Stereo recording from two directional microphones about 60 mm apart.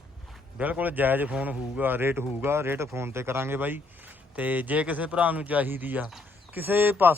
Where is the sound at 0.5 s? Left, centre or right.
Right.